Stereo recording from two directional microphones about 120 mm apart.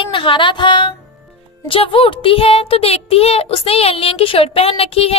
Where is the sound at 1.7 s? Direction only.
50° left (ahead or behind).